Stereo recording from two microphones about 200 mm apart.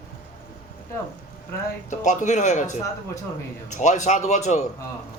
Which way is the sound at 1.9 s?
35° left (ahead or behind).